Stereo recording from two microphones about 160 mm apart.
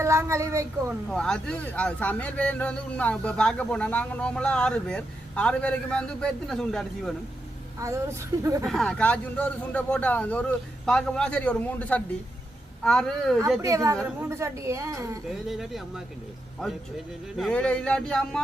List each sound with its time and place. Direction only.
0.0 s a woman's voice: 20° right (ahead or behind)
1.1 s speech: 5° left (ahead or behind)
7.8 s speech: 20° right (ahead or behind)
8.6 s speech: centre (ahead or behind)
13.6 s a woman's voice: 20° right (ahead or behind)
15.4 s speech: centre (ahead or behind)
17.3 s speech: 5° left (ahead or behind)